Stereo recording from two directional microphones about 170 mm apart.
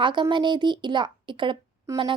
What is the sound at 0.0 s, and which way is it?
A woman's voice, 30° right (ahead or behind).